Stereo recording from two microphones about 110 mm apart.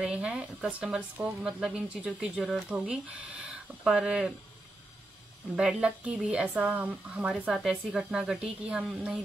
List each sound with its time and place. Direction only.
0.0 s speech: 10° right (ahead or behind)
5.6 s speech: 5° right (ahead or behind)